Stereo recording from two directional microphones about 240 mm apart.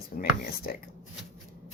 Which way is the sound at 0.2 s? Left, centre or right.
Left.